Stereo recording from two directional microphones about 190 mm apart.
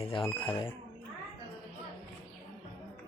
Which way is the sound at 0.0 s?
25° left (ahead or behind).